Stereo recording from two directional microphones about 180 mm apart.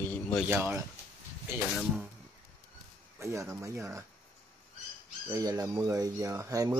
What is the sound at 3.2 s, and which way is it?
Speech, 15° right (ahead or behind).